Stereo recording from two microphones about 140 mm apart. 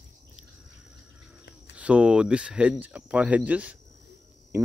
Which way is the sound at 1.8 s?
10° right (ahead or behind).